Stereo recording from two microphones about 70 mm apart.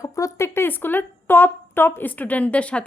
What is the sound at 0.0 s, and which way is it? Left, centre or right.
A woman's voice, left.